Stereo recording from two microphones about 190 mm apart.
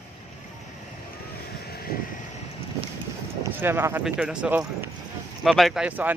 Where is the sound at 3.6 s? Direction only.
10° right (ahead or behind).